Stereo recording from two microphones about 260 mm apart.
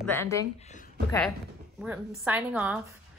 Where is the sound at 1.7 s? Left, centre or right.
Centre.